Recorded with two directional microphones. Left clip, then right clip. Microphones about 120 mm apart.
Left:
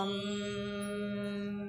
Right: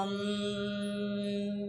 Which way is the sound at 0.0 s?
35° right (ahead or behind).